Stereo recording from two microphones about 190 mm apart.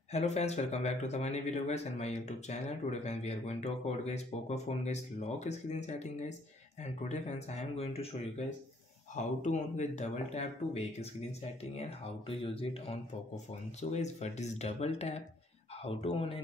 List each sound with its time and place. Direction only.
0.1 s speech: 35° left (ahead or behind)
9.1 s speech: 40° left (ahead or behind)
12.3 s speech: 30° left (ahead or behind)